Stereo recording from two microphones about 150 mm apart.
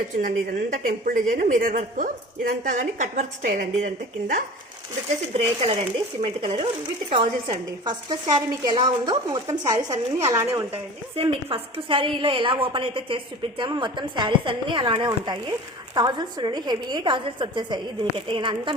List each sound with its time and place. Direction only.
0.2 s a woman's voice: 70° right (ahead or behind)
5.3 s a woman's voice: 45° right (ahead or behind); by 10.8 s 20° right (ahead or behind)
11.1 s a woman's voice: 40° right (ahead or behind)